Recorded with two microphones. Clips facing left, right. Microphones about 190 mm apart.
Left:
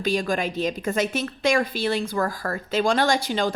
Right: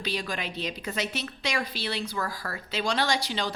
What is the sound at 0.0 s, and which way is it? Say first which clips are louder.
A woman's voice: left 9 dB; 45° left (ahead or behind).